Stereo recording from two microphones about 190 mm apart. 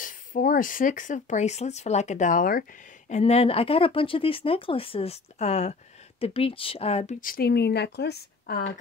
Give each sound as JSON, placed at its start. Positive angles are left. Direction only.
{"t": 0.0, "sound": "speech", "side_deg": 45}
{"t": 3.1, "sound": "speech", "side_deg": 35}